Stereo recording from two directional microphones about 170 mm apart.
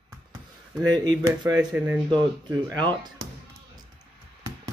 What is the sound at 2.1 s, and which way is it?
Speech, 25° right (ahead or behind).